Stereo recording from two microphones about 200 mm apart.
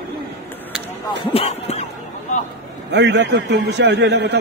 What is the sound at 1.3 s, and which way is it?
Speech, 30° left (ahead or behind).